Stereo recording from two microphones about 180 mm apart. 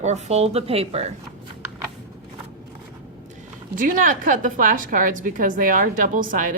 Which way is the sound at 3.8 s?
50° right (ahead or behind).